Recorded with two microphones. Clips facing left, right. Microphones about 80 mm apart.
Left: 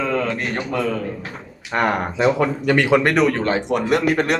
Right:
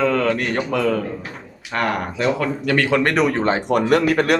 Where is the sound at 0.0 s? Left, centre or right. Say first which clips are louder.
Right 3 dB; right.